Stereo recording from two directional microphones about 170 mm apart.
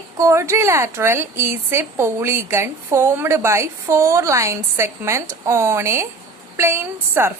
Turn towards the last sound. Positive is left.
turn(degrees=-15)  # may be behind; listen again after turning